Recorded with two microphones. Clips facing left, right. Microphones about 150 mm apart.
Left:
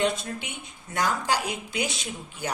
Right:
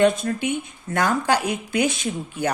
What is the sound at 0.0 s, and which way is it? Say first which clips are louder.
A woman's voice: right 8 dB; 55° right (ahead or behind).